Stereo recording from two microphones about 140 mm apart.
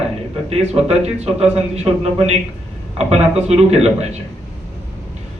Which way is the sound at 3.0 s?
50° right (ahead or behind).